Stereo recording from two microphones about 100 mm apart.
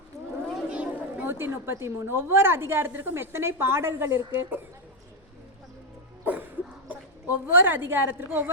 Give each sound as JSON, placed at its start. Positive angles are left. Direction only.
{"t": 0.5, "sound": "a woman's voice", "side_deg": -10}
{"t": 6.8, "sound": "speech", "side_deg": -20}